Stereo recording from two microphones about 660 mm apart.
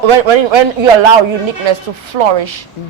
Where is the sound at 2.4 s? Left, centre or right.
Right.